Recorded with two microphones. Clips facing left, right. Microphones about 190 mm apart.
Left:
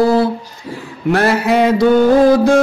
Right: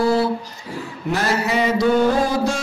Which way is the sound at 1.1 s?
60° left (ahead or behind).